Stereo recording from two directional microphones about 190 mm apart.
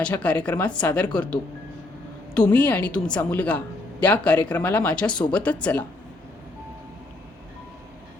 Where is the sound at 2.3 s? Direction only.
5° left (ahead or behind).